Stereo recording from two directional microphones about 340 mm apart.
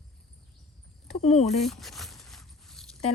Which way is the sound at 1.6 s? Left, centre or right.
Centre.